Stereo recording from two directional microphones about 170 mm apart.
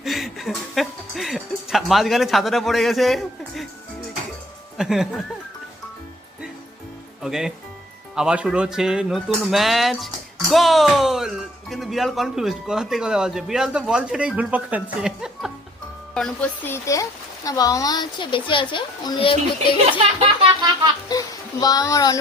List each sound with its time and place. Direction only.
0.0 s music: centre (ahead or behind)
4.8 s speech: centre (ahead or behind)
7.2 s speech: centre (ahead or behind)
15.0 s music: centre (ahead or behind)
16.1 s speech: 5° left (ahead or behind); by 19.7 s 30° left (ahead or behind)
19.8 s a child's voice: 35° right (ahead or behind)
21.1 s a child's voice: 20° left (ahead or behind)